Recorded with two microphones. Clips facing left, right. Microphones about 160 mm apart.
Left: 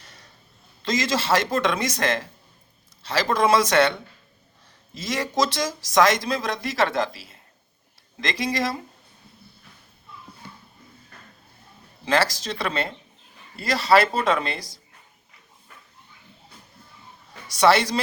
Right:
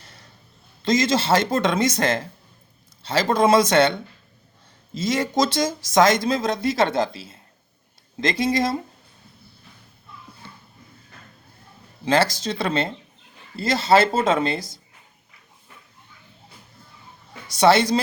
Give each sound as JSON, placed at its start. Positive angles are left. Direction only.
{"t": 0.9, "sound": "speech", "side_deg": -20}
{"t": 4.9, "sound": "speech", "side_deg": -25}
{"t": 12.0, "sound": "speech", "side_deg": -25}
{"t": 17.5, "sound": "speech", "side_deg": -25}